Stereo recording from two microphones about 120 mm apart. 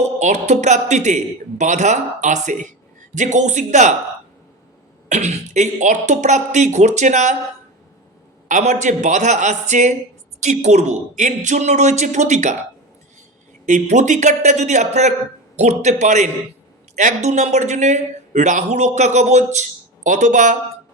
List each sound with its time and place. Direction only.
0.2 s speech: 70° right (ahead or behind); by 2.7 s 90° right
3.2 s speech: 80° right
5.0 s speech: 70° right (ahead or behind)
8.4 s speech: 85° right
10.4 s speech: 70° right (ahead or behind)
13.7 s speech: 85° right
20.1 s speech: 90° right